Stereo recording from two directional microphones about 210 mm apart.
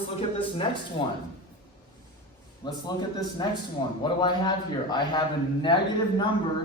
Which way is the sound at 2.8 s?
20° left (ahead or behind).